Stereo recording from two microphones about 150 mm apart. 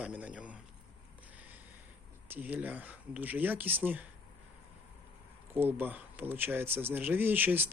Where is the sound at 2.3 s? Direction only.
10° right (ahead or behind).